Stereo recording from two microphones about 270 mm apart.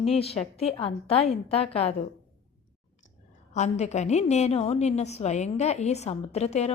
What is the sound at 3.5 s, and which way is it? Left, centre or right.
A woman's voice, left.